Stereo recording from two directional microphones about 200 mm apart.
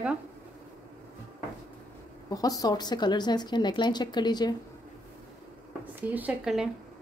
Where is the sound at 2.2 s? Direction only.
20° left (ahead or behind).